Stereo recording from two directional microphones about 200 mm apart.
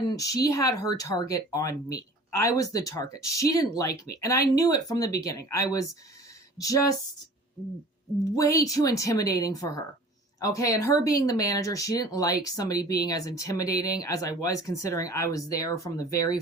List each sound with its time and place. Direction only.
0.1 s speech: 15° left (ahead or behind)
8.4 s speech: 15° left (ahead or behind)